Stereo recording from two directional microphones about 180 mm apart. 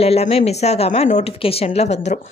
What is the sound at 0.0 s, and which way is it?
A woman's voice, 35° left (ahead or behind).